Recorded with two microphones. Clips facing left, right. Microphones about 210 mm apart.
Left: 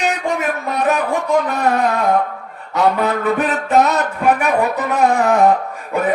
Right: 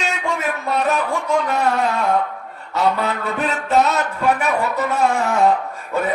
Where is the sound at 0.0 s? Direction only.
15° left (ahead or behind).